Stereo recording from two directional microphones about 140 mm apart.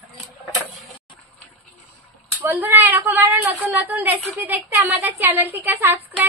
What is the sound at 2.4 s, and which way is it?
A woman's voice, 15° right (ahead or behind).